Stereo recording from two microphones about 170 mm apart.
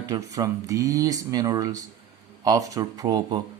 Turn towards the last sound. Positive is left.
turn(degrees=-20)  # may be behind; listen again after turning